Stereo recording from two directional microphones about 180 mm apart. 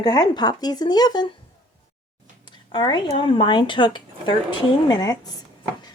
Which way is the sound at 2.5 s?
25° left (ahead or behind).